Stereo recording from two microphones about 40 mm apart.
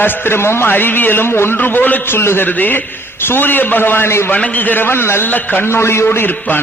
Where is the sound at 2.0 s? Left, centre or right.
Left.